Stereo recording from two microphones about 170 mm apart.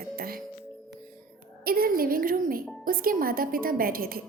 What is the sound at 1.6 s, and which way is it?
A woman's voice, 60° right (ahead or behind).